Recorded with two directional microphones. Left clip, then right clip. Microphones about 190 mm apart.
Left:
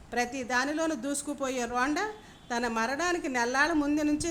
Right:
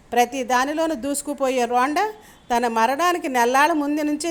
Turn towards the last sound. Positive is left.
turn(degrees=-25)  # may be behind; listen again after turning